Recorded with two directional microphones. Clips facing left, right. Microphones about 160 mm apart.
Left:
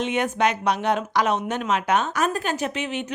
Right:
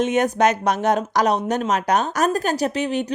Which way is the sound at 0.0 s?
45° right (ahead or behind).